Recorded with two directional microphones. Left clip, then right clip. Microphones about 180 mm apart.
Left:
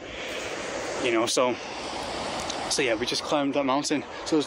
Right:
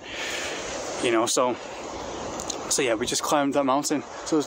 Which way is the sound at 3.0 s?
35° right (ahead or behind).